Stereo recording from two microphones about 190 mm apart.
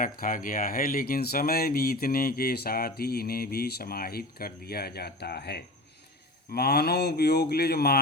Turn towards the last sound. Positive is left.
turn(degrees=55)  # may be behind; listen again after turning